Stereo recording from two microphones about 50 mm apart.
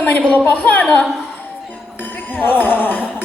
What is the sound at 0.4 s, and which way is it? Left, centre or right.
Speech, left.